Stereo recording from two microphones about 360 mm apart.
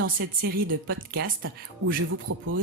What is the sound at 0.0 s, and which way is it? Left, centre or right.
Speech, right.